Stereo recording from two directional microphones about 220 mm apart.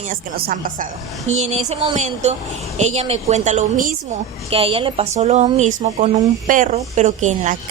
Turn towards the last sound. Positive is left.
turn(degrees=-35)  # may be behind; listen again after turning